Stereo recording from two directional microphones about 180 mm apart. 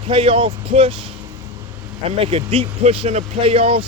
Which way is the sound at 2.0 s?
30° right (ahead or behind).